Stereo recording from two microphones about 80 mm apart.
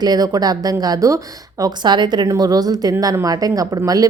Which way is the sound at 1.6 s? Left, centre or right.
Right.